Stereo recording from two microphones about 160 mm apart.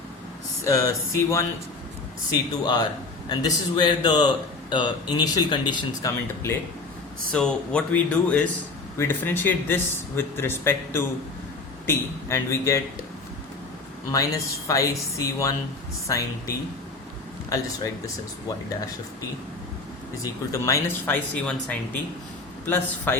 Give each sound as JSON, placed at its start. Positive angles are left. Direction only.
{"t": 0.6, "sound": "speech", "side_deg": 20}
{"t": 3.2, "sound": "speech", "side_deg": 30}
{"t": 7.3, "sound": "speech", "side_deg": 5}
{"t": 14.1, "sound": "speech", "side_deg": 20}
{"t": 20.2, "sound": "speech", "side_deg": 20}